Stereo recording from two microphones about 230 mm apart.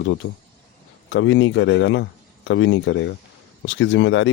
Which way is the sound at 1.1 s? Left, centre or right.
Left.